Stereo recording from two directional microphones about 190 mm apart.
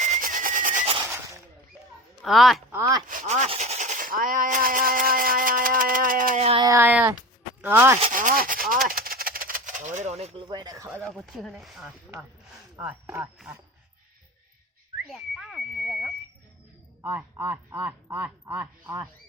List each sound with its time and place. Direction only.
0.0 s a sound: 40° right (ahead or behind)
2.2 s speech: centre (ahead or behind)
2.7 s speech: 15° right (ahead or behind)
3.1 s speech: 40° right (ahead or behind)
6.6 s speech: 15° right (ahead or behind)
8.1 s radio: 45° right (ahead or behind)
8.9 s a sound: 50° right (ahead or behind); by 10.4 s 35° right (ahead or behind)
10.5 s speech: 20° right (ahead or behind)
11.3 s speech: 5° left (ahead or behind)
15.1 s a sound: centre (ahead or behind)
17.0 s speech: 10° right (ahead or behind)